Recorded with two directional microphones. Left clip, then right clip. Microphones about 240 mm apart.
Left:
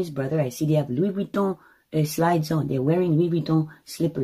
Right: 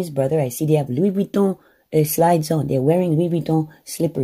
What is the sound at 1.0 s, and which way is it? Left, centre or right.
Speech, right.